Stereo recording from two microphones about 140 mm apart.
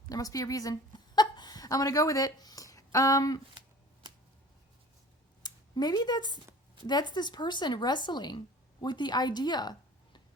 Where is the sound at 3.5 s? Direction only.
30° right (ahead or behind).